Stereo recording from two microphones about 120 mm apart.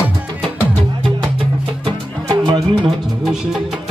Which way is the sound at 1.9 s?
45° right (ahead or behind).